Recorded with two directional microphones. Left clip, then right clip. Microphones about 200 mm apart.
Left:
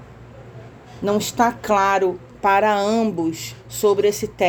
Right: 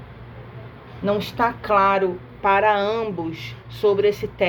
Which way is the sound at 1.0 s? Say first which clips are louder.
Left 2 dB; 60° left (ahead or behind).